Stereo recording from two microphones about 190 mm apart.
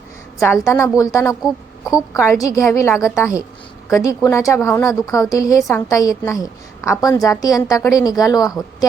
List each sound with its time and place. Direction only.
0.3 s a woman's voice: 15° left (ahead or behind)
1.4 s a woman's voice: centre (ahead or behind)
2.1 s a woman's voice: 15° left (ahead or behind)